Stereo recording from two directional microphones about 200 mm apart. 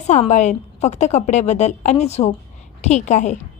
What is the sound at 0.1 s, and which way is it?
A woman's voice, 35° left (ahead or behind).